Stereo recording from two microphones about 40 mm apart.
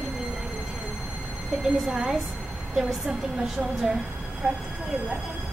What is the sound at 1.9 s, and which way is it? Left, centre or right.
Speech, centre.